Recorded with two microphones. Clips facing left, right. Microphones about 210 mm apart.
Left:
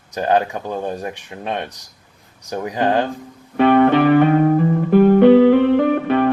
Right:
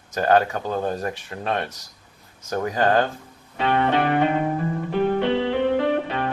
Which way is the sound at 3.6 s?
55° left (ahead or behind).